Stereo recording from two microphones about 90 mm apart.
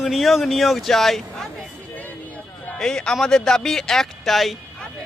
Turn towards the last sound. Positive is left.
turn(degrees=0)  # may be behind; listen again after turning